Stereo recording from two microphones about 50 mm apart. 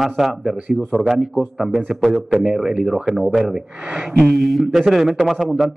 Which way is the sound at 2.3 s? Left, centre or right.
Centre.